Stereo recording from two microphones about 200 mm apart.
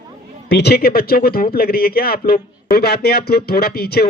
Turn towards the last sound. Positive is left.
turn(degrees=50)  # may be behind; listen again after turning